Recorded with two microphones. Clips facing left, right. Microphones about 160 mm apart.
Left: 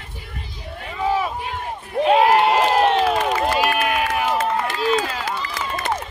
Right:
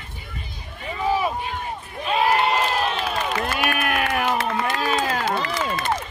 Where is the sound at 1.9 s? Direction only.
75° left (ahead or behind).